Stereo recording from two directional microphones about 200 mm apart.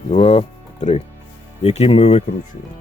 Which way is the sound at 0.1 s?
30° left (ahead or behind).